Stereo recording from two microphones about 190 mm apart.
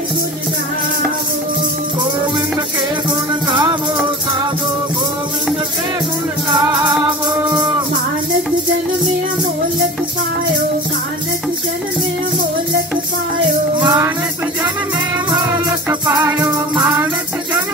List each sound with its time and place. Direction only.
13.7 s music: 20° right (ahead or behind)
15.9 s music: 15° right (ahead or behind)